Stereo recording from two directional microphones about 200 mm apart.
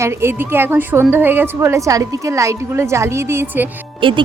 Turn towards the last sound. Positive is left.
turn(degrees=-25)  # may be behind; listen again after turning